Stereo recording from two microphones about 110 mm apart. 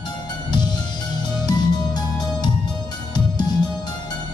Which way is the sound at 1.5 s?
40° left (ahead or behind).